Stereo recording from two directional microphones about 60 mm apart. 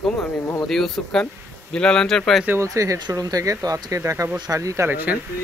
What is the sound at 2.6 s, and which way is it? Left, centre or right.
Speech, right.